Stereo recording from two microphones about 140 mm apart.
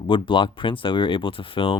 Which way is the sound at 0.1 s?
35° left (ahead or behind).